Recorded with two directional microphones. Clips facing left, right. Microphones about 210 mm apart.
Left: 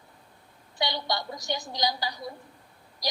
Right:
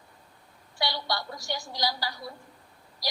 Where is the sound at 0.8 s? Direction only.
20° left (ahead or behind).